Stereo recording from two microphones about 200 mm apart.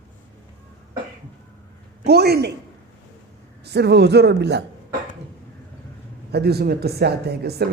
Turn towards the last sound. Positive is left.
turn(degrees=-55)  # may be behind; listen again after turning